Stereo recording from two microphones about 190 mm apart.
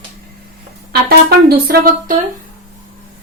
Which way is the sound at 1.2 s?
55° right (ahead or behind).